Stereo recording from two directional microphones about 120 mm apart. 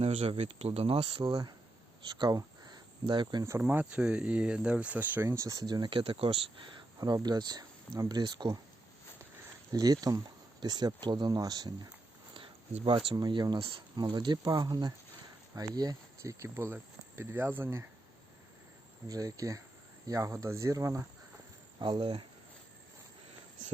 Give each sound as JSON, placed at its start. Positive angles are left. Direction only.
{"t": 0.0, "sound": "speech", "side_deg": -55}
{"t": 1.2, "sound": "speech", "side_deg": -35}
{"t": 3.6, "sound": "speech", "side_deg": -10}
{"t": 9.7, "sound": "speech", "side_deg": -30}
{"t": 12.3, "sound": "a sound", "side_deg": -50}
{"t": 13.1, "sound": "speech", "side_deg": -35}
{"t": 19.0, "sound": "speech", "side_deg": -30}
{"t": 21.8, "sound": "speech", "side_deg": -40}